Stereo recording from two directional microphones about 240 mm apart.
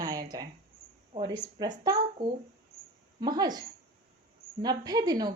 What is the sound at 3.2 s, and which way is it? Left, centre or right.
A woman's voice, centre.